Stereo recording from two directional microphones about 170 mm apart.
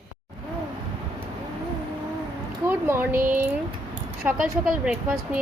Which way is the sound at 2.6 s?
15° right (ahead or behind).